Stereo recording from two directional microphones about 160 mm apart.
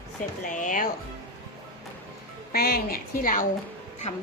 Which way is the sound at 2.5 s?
70° left (ahead or behind).